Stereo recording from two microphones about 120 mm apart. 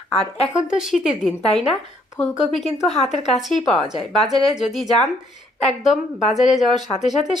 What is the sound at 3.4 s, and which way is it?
A woman's voice, centre (ahead or behind).